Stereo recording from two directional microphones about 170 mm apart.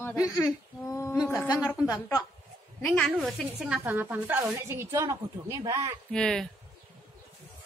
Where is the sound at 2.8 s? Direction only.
5° left (ahead or behind); by 6.0 s 20° right (ahead or behind).